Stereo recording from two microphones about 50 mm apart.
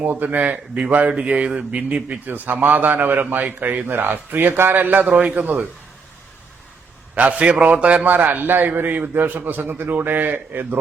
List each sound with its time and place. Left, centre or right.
0.0 s a man's voice: right
0.5 s a man's voice: right
5.0 s speech: right
5.3 s a man's voice: right
7.2 s speech: right
8.0 s a man's voice: right